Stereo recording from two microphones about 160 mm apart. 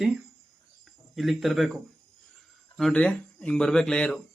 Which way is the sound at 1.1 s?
Centre (ahead or behind).